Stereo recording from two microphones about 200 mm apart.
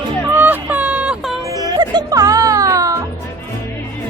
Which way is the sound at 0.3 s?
10° right (ahead or behind).